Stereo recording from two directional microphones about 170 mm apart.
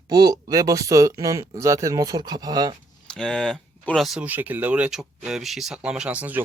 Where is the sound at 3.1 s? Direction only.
5° left (ahead or behind).